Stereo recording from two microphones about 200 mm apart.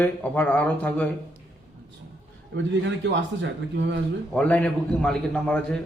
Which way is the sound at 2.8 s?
60° right (ahead or behind).